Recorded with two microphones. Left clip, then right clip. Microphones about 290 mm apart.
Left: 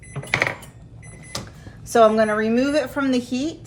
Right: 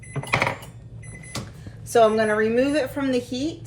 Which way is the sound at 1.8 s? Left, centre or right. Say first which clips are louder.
Left 2 dB; left.